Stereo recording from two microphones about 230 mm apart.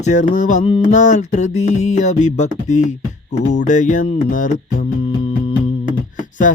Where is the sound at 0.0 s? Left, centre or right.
Left.